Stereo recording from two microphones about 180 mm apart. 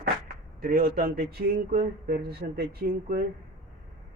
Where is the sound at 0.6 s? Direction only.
55° right (ahead or behind).